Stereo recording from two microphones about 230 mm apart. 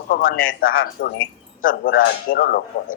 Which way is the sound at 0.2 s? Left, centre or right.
Left.